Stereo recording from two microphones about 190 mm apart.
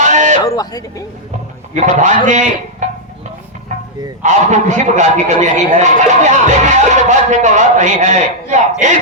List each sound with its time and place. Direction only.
0.0 s a sound: 40° right (ahead or behind)
0.3 s speech: 20° left (ahead or behind)
1.7 s a man's voice: 40° right (ahead or behind)
4.2 s a man's voice: 40° right (ahead or behind)